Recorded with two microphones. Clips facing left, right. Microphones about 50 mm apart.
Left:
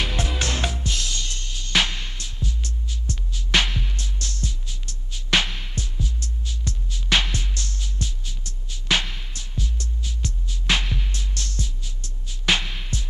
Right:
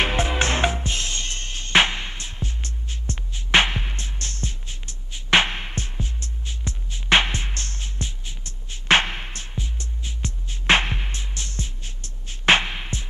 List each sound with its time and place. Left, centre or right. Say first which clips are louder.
0.0 s music: right 5 dB; right
9.6 s music: left 5 dB; right